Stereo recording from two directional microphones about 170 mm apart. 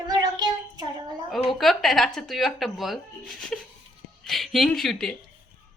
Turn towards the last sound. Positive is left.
turn(degrees=0)  # may be behind; listen again after turning